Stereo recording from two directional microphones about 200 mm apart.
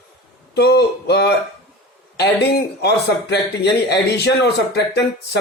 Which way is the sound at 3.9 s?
55° left (ahead or behind).